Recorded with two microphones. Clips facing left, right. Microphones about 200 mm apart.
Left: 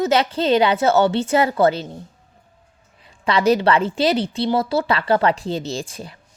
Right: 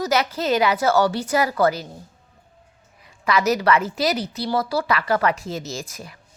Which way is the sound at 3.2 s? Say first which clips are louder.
Left 3 dB; 30° left (ahead or behind).